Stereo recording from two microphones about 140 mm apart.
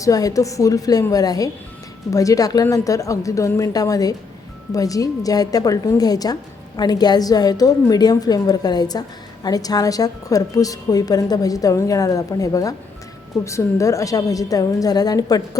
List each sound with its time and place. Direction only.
0.0 s a woman's voice: 25° left (ahead or behind)